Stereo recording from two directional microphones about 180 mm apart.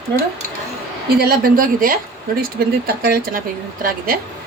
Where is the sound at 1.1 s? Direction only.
55° right (ahead or behind).